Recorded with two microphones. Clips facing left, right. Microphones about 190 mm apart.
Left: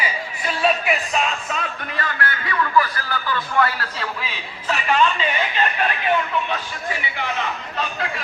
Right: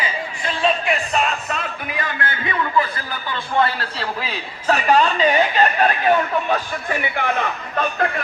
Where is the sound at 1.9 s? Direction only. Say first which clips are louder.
Left 1 dB; 20° right (ahead or behind).